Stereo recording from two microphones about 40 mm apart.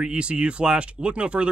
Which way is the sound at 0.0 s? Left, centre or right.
Right.